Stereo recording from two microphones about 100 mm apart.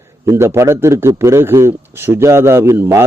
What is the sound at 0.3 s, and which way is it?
A man's voice, 30° right (ahead or behind).